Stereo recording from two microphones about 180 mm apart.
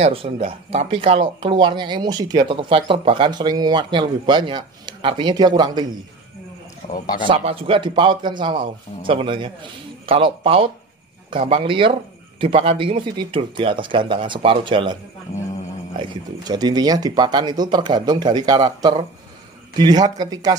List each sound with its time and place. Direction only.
0.0 s speech: 30° right (ahead or behind)
7.2 s speech: 30° right (ahead or behind)
16.0 s speech: 25° right (ahead or behind)